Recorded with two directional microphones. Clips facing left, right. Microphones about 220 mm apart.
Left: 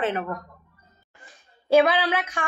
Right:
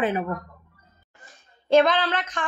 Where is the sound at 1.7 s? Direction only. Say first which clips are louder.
Even; 10° left (ahead or behind).